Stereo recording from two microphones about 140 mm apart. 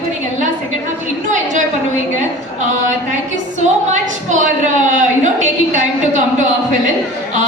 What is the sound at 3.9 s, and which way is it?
A woman's voice, 60° right (ahead or behind).